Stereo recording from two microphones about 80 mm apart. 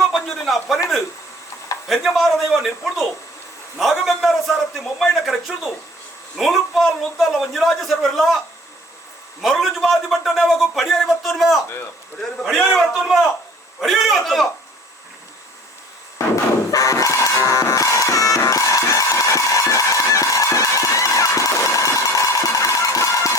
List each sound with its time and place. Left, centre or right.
0.0 s a sound: centre
1.9 s a man's voice: centre
9.4 s a man's voice: centre
16.1 s music: left